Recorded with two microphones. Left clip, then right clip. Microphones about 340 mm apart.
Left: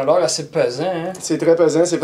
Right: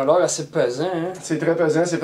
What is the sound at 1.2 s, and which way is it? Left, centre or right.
Speech, right.